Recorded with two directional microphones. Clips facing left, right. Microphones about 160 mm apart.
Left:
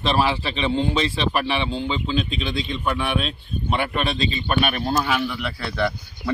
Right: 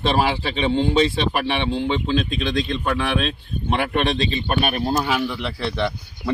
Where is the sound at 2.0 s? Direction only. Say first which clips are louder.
Right 3 dB; 75° right (ahead or behind).